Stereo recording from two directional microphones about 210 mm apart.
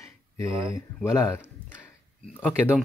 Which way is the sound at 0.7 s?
10° left (ahead or behind).